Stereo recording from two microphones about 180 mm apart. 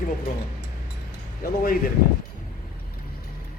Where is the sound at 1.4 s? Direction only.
55° left (ahead or behind).